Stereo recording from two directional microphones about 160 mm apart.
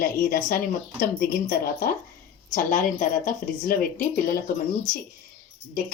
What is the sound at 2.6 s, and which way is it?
Speech, 55° left (ahead or behind).